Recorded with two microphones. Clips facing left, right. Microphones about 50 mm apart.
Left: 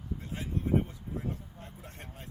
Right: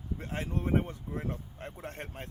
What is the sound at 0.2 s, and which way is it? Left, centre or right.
Speech, right.